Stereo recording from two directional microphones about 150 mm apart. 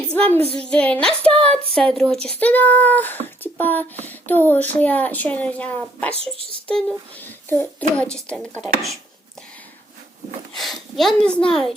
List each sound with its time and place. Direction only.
0.1 s child singing: 10° left (ahead or behind)
0.5 s speech: 5° left (ahead or behind)
6.3 s speech: 35° right (ahead or behind)
6.7 s speech: 10° left (ahead or behind)
10.5 s speech: centre (ahead or behind)